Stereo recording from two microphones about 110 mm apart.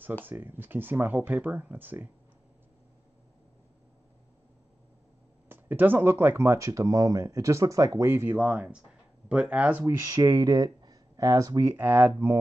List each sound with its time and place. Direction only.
0.2 s speech: 15° right (ahead or behind)
5.5 s speech: 15° right (ahead or behind)
10.0 s speech: 30° right (ahead or behind)
11.7 s speech: 20° right (ahead or behind)